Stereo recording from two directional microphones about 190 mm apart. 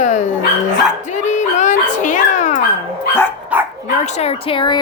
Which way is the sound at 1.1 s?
40° left (ahead or behind).